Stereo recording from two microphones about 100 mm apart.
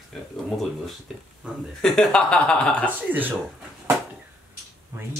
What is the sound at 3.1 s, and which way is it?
Speech, 20° right (ahead or behind).